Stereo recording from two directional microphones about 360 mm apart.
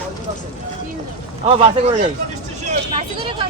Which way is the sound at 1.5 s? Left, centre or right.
Centre.